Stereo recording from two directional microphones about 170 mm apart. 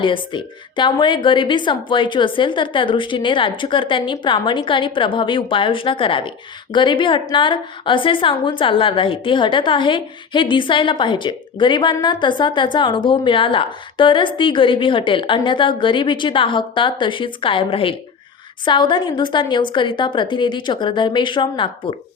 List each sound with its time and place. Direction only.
0.0 s a woman's voice: 30° left (ahead or behind)